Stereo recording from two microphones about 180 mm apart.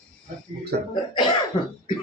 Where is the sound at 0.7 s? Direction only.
60° right (ahead or behind).